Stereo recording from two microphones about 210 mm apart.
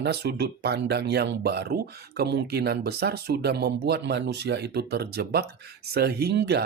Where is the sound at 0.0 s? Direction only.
50° right (ahead or behind).